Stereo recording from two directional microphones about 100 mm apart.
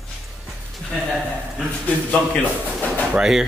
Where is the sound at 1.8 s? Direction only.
15° left (ahead or behind).